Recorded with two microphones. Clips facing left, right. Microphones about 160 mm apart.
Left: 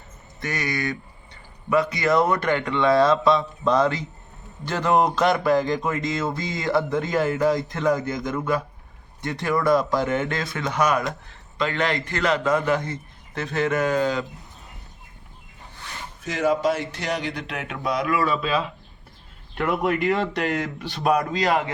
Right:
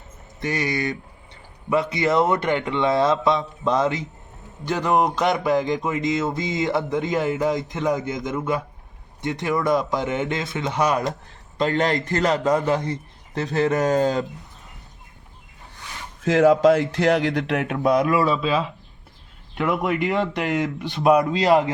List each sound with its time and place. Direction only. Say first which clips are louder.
0.3 s speech: right 3 dB; 30° right (ahead or behind)
4.6 s music: even; 15° right (ahead or behind)
9.2 s speech: even; 20° right (ahead or behind)
11.5 s a man's voice: right 3 dB; 40° right (ahead or behind)
16.2 s speech: right 7 dB; 90° right; by 18.1 s 50° right (ahead or behind)
18.1 s speech: right 3 dB; 30° right (ahead or behind)
19.5 s music: right 1 dB; 10° right (ahead or behind)
21.3 s speech: right 5 dB; 30° right (ahead or behind)